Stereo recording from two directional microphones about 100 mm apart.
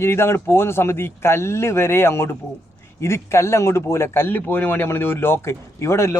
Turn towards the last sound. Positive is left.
turn(degrees=30)  # may be behind; listen again after turning